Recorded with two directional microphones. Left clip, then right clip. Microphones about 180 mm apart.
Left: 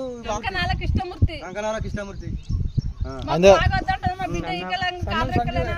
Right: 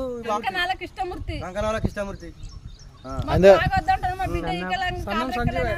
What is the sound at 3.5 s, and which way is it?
Speech, 10° left (ahead or behind).